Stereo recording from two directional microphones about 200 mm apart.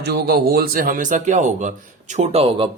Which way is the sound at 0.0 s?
50° right (ahead or behind).